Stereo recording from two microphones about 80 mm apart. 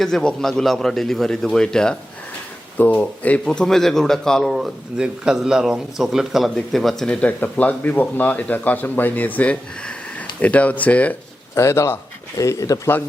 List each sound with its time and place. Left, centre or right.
0.0 s speech: centre
2.7 s speech: left
3.4 s speech: centre
7.1 s speech: centre
11.5 s a man's voice: left
12.4 s speech: left